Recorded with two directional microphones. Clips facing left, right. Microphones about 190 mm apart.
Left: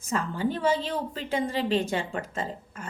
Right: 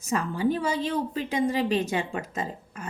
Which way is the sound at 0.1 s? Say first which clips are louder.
Right 3 dB; 15° right (ahead or behind).